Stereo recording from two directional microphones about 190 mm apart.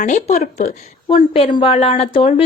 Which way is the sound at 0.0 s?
40° left (ahead or behind).